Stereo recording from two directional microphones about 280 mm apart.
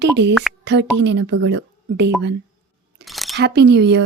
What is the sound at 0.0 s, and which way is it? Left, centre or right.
Speech, right.